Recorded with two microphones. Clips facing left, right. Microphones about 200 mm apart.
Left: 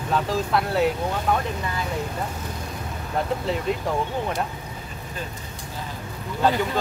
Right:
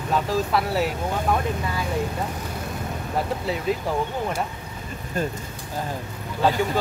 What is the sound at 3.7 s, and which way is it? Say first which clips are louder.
Speech: right 3 dB; 5° right (ahead or behind).